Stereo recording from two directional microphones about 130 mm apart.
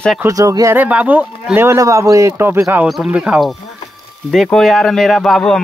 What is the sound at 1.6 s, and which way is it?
Speech, 25° right (ahead or behind).